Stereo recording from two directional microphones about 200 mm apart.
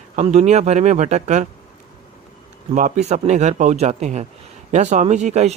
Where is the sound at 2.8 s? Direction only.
35° right (ahead or behind).